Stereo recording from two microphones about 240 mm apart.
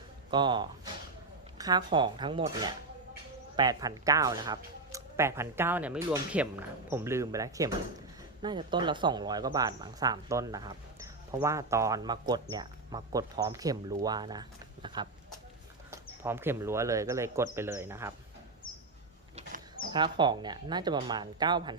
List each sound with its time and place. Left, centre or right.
0.3 s speech: centre
16.2 s speech: centre
19.9 s speech: centre